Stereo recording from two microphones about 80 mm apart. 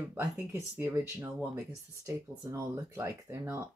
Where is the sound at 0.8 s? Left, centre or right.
Right.